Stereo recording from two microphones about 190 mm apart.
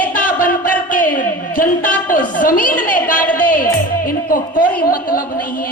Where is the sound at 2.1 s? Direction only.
45° left (ahead or behind).